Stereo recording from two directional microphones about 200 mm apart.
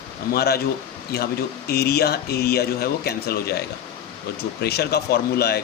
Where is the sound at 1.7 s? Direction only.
50° left (ahead or behind).